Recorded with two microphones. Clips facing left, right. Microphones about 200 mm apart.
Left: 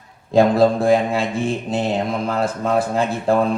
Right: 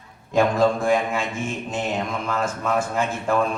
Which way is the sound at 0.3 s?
35° left (ahead or behind).